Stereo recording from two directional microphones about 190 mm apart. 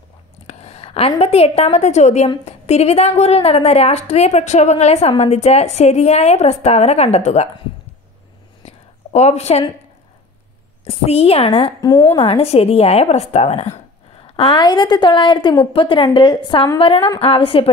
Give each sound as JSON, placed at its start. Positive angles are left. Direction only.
{"t": 0.5, "sound": "a woman's voice", "side_deg": 35}
{"t": 8.6, "sound": "a sound", "side_deg": 35}
{"t": 10.9, "sound": "a woman's voice", "side_deg": 30}
{"t": 11.8, "sound": "a woman's voice", "side_deg": 15}
{"t": 12.2, "sound": "a woman's voice", "side_deg": 30}